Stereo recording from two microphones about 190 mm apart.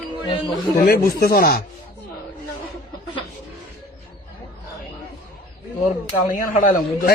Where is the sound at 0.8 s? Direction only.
55° left (ahead or behind).